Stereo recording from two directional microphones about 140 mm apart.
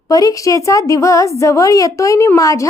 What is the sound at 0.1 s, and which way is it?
A woman's voice, 25° left (ahead or behind).